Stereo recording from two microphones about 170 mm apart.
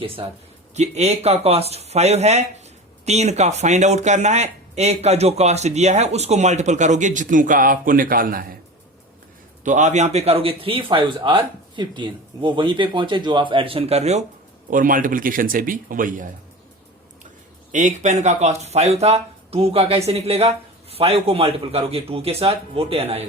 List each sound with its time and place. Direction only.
0.2 s speech: 30° right (ahead or behind)
0.8 s speech: 40° right (ahead or behind); by 8.5 s 55° right (ahead or behind)
9.6 s speech: 45° right (ahead or behind)
14.7 s speech: 50° right (ahead or behind)
17.7 s speech: 45° right (ahead or behind)